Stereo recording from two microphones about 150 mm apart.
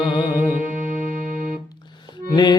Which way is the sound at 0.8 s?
65° right (ahead or behind).